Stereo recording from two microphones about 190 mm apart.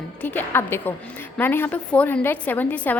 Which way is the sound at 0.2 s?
10° left (ahead or behind).